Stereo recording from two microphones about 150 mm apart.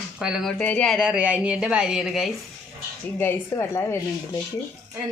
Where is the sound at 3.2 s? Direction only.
15° left (ahead or behind).